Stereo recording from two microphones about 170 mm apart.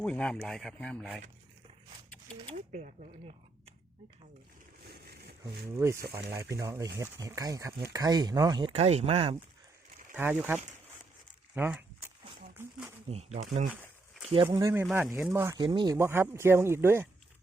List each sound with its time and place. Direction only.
0.0 s speech: 5° left (ahead or behind)
2.7 s speech: 45° right (ahead or behind)
4.9 s a sound: 70° right (ahead or behind)
5.7 s speech: 15° right (ahead or behind)
8.7 s speech: 40° right (ahead or behind)
10.2 s speech: 10° right (ahead or behind)
11.5 s a sound: 10° right (ahead or behind)
13.1 s speech: 40° right (ahead or behind)
14.5 s speech: 15° right (ahead or behind)
15.0 s speech: centre (ahead or behind)
15.3 s speech: 15° right (ahead or behind)
15.6 s speech: 25° right (ahead or behind)
16.0 s speech: 15° right (ahead or behind)